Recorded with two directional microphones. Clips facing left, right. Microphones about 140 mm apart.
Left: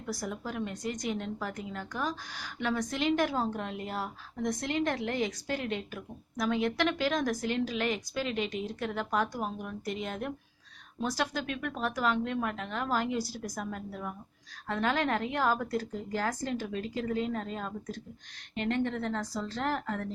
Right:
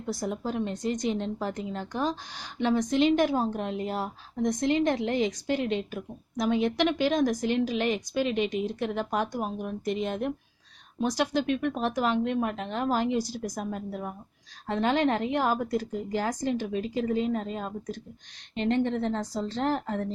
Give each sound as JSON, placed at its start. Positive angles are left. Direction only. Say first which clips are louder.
{"t": 0.0, "sound": "a woman's voice", "louder": "right 5 dB", "side_deg": -25}